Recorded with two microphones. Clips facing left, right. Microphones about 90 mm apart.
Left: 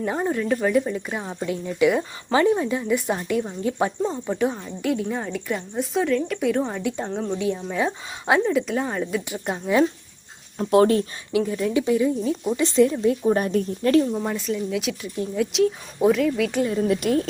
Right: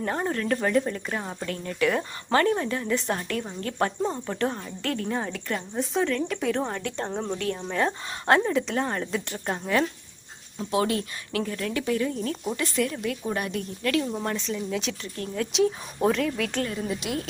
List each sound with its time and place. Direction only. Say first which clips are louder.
0.0 s a woman's voice: left 3 dB; 5° left (ahead or behind)
10.6 s speech: left 8 dB; 55° left (ahead or behind)
11.3 s a woman's voice: left 6 dB; 15° left (ahead or behind)
12.6 s a woman's voice: left 10 dB; 25° left (ahead or behind)
14.0 s a woman's voice: left 4 dB; 5° left (ahead or behind)
15.5 s a woman's voice: even; centre (ahead or behind)